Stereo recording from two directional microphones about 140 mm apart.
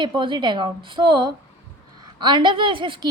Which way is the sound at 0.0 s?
35° right (ahead or behind).